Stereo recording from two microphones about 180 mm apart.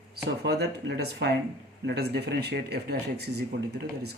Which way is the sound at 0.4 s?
65° right (ahead or behind).